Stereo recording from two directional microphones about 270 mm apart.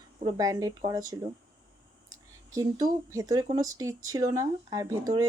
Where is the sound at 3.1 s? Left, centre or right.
Centre.